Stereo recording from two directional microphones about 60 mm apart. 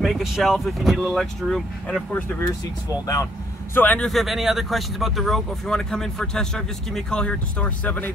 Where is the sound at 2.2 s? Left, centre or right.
Left.